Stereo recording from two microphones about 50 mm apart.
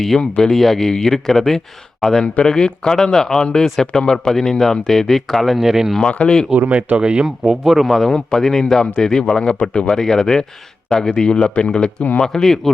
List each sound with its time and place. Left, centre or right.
0.2 s speech: centre
0.5 s speech: centre
2.2 s speech: left; by 5.5 s centre
5.5 s speech: centre
6.0 s speech: left
6.9 s speech: centre
7.6 s speech: centre